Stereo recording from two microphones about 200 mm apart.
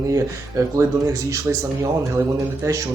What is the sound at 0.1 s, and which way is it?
Speech, 15° right (ahead or behind).